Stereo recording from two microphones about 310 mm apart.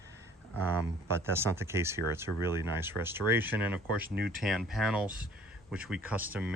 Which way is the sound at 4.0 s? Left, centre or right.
Right.